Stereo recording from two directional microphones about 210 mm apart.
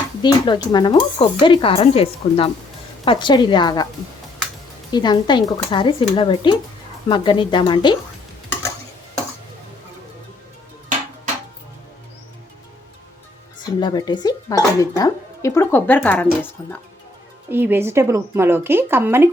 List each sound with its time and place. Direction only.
0.2 s speech: 20° left (ahead or behind)
4.9 s speech: 20° left (ahead or behind)
13.7 s speech: 20° left (ahead or behind)
17.5 s speech: 10° right (ahead or behind)